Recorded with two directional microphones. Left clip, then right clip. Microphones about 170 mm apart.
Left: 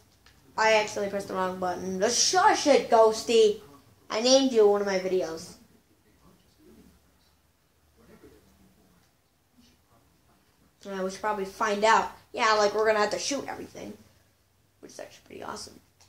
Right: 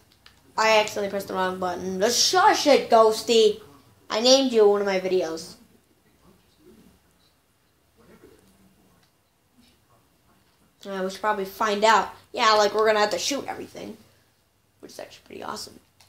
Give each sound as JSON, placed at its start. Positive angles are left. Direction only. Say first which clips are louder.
{"t": 0.6, "sound": "a woman's voice", "louder": "right 3 dB", "side_deg": -40}
{"t": 10.8, "sound": "a woman's voice", "louder": "right 3 dB", "side_deg": -40}